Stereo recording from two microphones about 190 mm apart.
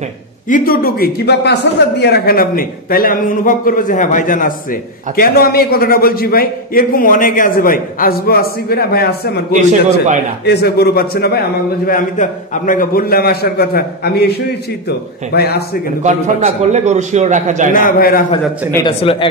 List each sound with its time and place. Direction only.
0.5 s a man's voice: 50° left (ahead or behind)
9.5 s a man's voice: 40° right (ahead or behind)
10.4 s a man's voice: 60° left (ahead or behind)
16.0 s a man's voice: 40° right (ahead or behind)
17.7 s a man's voice: 50° left (ahead or behind)
18.9 s speech: 25° left (ahead or behind)